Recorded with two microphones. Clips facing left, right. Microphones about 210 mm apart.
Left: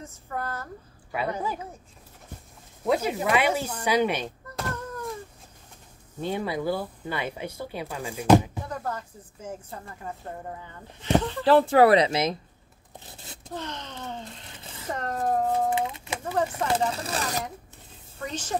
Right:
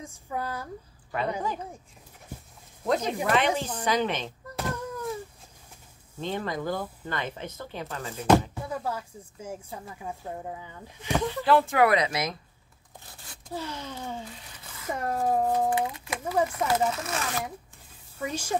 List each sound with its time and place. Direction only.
0.0 s speech: 10° right (ahead or behind)
2.8 s speech: 5° left (ahead or behind)
4.6 s a sound: 5° right (ahead or behind)
6.1 s speech: 10° left (ahead or behind)
8.6 s speech: 10° right (ahead or behind)
11.4 s speech: 35° left (ahead or behind)
12.9 s scissors: 20° left (ahead or behind)
13.5 s speech: 10° right (ahead or behind)
14.6 s a sound: 25° left (ahead or behind)
14.9 s speech: 10° right (ahead or behind)
15.7 s speech: 25° left (ahead or behind)
18.2 s speech: 10° right (ahead or behind)